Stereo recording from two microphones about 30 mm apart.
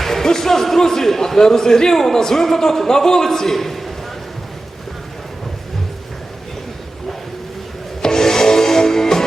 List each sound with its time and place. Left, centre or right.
0.0 s a man's voice: centre
8.0 s music: centre